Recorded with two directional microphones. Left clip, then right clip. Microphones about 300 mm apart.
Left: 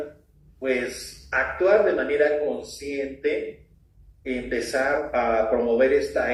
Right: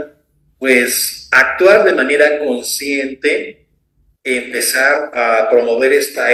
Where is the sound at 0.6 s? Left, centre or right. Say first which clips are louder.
Right 13 dB; right.